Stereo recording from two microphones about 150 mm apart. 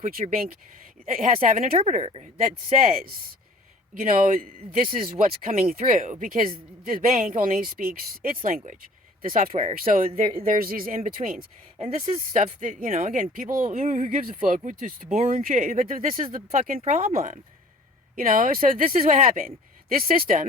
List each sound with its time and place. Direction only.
0.0 s speech: 65° right (ahead or behind)
2.0 s speech: 40° right (ahead or behind)
2.2 s speech: 60° right (ahead or behind)
4.9 s speech: 65° right (ahead or behind)